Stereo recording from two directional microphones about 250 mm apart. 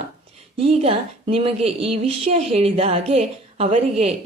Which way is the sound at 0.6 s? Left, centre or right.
Right.